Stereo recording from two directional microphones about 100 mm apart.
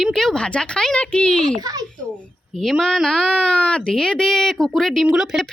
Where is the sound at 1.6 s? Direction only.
40° right (ahead or behind).